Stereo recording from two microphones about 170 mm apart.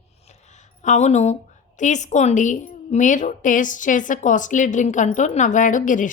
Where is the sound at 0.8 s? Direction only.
45° left (ahead or behind).